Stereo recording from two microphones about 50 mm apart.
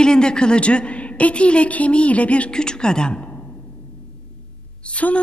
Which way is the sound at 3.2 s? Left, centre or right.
Left.